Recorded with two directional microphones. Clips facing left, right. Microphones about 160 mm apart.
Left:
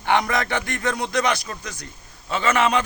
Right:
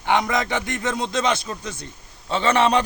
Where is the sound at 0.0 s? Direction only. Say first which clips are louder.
Even; 15° right (ahead or behind).